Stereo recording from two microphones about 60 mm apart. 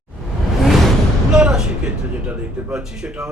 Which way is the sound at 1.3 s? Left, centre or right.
Centre.